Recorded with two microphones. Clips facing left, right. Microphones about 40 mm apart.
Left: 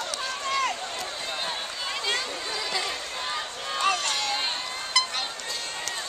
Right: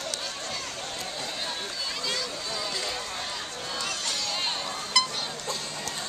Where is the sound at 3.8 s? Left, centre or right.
Left.